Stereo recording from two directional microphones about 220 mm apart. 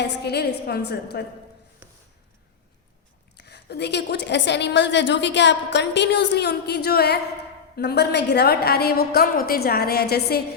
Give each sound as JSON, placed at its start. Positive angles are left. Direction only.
{"t": 0.0, "sound": "a woman's voice", "side_deg": 50}
{"t": 1.8, "sound": "a sound", "side_deg": -10}
{"t": 3.3, "sound": "a woman's voice", "side_deg": 50}